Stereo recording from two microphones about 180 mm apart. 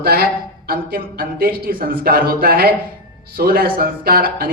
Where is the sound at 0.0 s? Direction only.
55° right (ahead or behind).